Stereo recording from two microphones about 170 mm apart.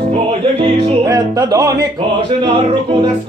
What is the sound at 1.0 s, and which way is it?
Music, 20° right (ahead or behind).